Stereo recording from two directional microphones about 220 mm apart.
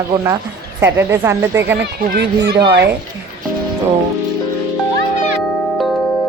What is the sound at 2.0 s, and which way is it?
Speech, 45° right (ahead or behind).